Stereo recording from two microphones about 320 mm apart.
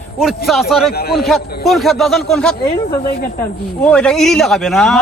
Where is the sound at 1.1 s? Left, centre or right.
Centre.